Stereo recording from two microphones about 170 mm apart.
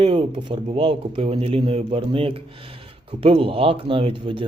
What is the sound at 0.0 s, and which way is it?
Speech, 30° right (ahead or behind).